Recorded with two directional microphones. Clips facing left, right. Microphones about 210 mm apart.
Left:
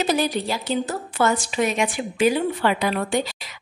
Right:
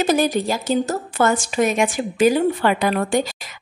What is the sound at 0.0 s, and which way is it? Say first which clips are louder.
A woman's voice: right 4 dB; 45° right (ahead or behind).